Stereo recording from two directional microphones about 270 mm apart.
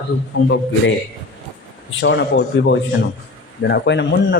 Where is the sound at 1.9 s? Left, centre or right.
Left.